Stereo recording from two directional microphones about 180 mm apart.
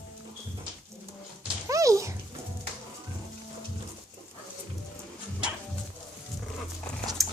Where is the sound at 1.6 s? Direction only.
15° right (ahead or behind).